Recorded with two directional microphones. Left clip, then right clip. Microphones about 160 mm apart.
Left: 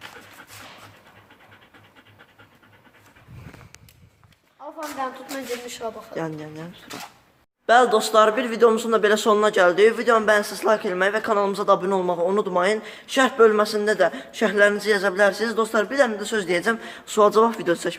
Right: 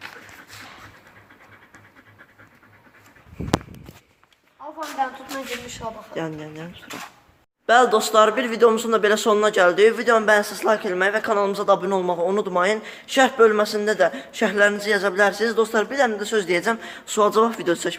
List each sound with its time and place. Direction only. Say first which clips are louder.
5.0 s speech: right 5 dB; 60° left (ahead or behind)
7.7 s a man's voice: even; 5° left (ahead or behind)